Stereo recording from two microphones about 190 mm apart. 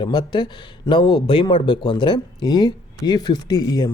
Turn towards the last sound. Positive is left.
turn(degrees=20)  # may be behind; listen again after turning